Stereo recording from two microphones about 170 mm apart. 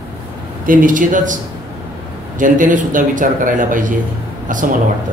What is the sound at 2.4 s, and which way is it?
A man's voice, 50° right (ahead or behind).